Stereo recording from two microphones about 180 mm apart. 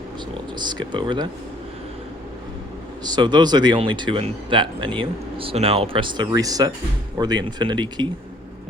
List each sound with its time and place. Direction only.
0.6 s speech: 25° right (ahead or behind)
3.0 s speech: 25° right (ahead or behind)